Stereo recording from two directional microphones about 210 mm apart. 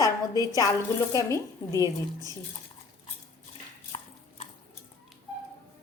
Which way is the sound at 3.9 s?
25° left (ahead or behind).